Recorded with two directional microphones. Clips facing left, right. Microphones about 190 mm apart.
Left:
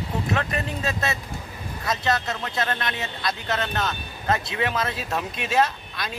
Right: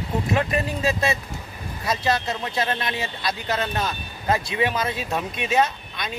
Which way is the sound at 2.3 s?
15° right (ahead or behind).